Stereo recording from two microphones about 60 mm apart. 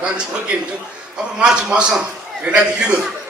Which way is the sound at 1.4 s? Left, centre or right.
Centre.